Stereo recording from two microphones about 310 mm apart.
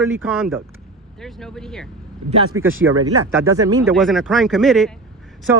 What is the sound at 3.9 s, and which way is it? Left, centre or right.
Speech, centre.